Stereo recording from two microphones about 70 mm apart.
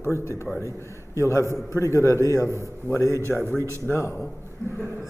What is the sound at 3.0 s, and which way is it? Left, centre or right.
Speech, right.